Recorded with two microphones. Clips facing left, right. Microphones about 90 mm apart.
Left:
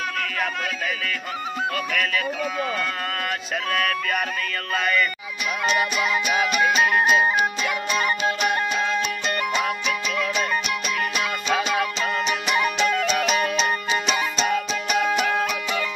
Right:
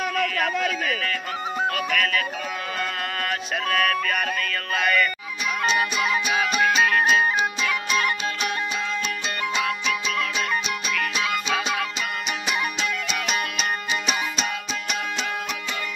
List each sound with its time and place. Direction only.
1.7 s music: centre (ahead or behind)
3.6 s music: centre (ahead or behind)
6.6 s music: 15° left (ahead or behind)
12.4 s music: 70° left (ahead or behind)
12.8 s music: 35° left (ahead or behind)